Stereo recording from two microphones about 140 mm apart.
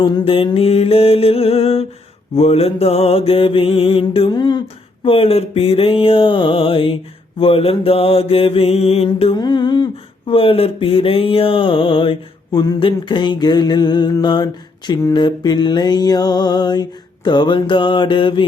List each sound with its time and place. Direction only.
0.0 s mantra: 30° left (ahead or behind)
5.0 s mantra: 45° left (ahead or behind)
9.4 s a sound: 30° left (ahead or behind)